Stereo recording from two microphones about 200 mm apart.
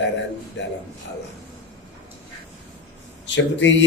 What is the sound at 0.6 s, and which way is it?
Speech, 65° left (ahead or behind).